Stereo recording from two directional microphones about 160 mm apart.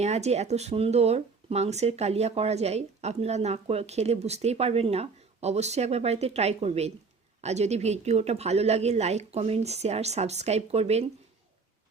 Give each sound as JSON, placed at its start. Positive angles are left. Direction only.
{"t": 0.0, "sound": "a woman's voice", "side_deg": -45}